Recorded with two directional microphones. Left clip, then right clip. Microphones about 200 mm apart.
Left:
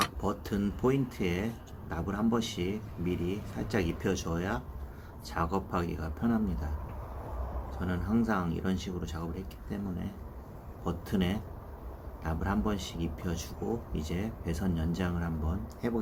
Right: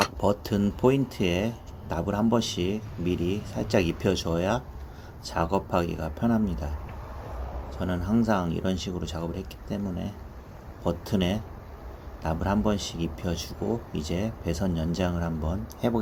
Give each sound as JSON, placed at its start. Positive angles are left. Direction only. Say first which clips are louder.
{"t": 0.0, "sound": "speech", "louder": "right 7 dB", "side_deg": -20}
{"t": 7.8, "sound": "speech", "louder": "right 5 dB", "side_deg": -20}